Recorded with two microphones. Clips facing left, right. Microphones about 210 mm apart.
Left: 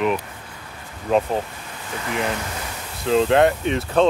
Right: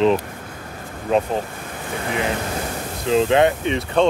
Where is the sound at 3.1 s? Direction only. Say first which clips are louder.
Even; centre (ahead or behind).